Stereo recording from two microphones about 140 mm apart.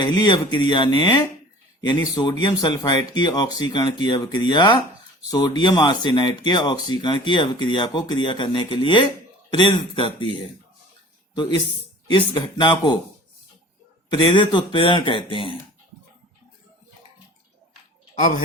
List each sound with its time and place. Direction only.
0.0 s speech: 30° left (ahead or behind)
12.0 s speech: 35° left (ahead or behind)
14.1 s speech: 35° left (ahead or behind)